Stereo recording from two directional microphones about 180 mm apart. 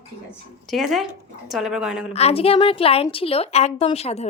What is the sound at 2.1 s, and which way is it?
A woman's voice, 35° left (ahead or behind).